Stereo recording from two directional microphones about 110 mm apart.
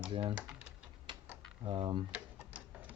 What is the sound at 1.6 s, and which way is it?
Speech, 45° right (ahead or behind).